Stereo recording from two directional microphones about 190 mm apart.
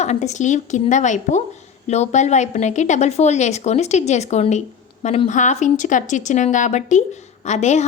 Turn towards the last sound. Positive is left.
turn(degrees=35)  # may be behind; listen again after turning